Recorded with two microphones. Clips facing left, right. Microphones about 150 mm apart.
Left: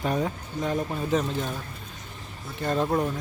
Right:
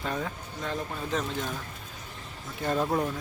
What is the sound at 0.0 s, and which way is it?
Speech, 20° left (ahead or behind).